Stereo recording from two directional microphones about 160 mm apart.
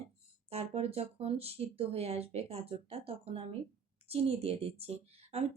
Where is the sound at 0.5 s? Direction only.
40° right (ahead or behind).